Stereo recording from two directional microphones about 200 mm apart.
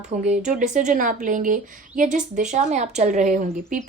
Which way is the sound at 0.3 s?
35° right (ahead or behind).